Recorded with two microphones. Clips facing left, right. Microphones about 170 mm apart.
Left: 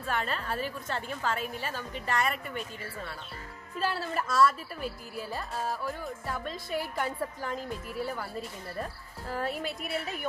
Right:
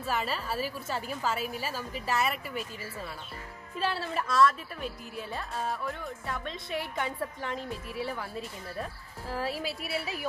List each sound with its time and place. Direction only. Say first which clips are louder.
0.0 s a woman's voice: even; 5° right (ahead or behind)